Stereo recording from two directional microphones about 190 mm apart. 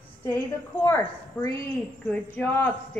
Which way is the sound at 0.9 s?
15° left (ahead or behind).